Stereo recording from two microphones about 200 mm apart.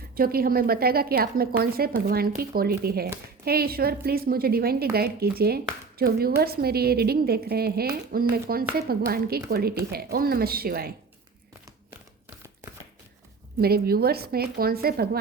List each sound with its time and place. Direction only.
0.1 s a woman's voice: 45° right (ahead or behind)
13.6 s a woman's voice: 50° right (ahead or behind)